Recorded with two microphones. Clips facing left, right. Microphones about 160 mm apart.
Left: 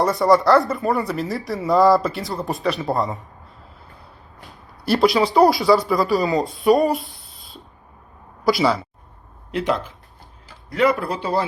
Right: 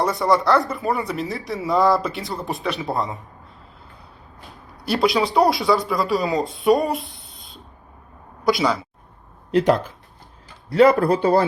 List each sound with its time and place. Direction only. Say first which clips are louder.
0.0 s speech: left 3 dB; centre (ahead or behind)
4.9 s speech: left 3 dB; centre (ahead or behind)
9.5 s a man's voice: right 5 dB; 35° right (ahead or behind); by 11.4 s 50° right (ahead or behind)